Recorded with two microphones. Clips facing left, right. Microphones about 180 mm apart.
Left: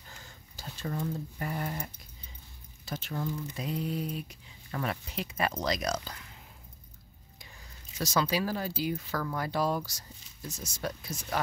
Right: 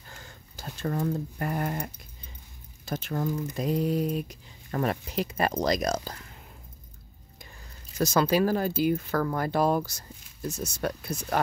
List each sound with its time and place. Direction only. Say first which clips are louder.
0.1 s a sound: right 4 dB; 50° right (ahead or behind)
2.8 s speech: right 5 dB; 45° right (ahead or behind)
8.1 s speech: right 6 dB; 50° right (ahead or behind)